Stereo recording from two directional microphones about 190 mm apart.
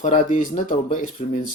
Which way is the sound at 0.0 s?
40° left (ahead or behind).